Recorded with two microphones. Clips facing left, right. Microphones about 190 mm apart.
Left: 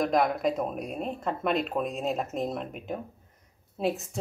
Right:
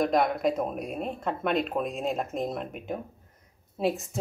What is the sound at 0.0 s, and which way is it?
Speech, centre (ahead or behind).